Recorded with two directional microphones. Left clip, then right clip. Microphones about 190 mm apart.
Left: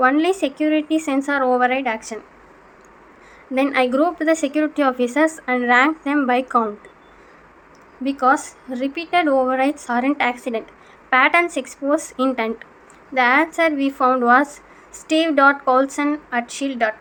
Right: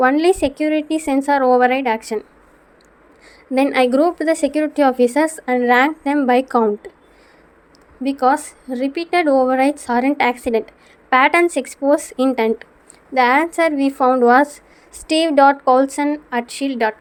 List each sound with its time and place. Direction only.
0.0 s a woman's voice: 40° right (ahead or behind)
3.5 s a woman's voice: 45° right (ahead or behind)
8.0 s a woman's voice: 45° right (ahead or behind)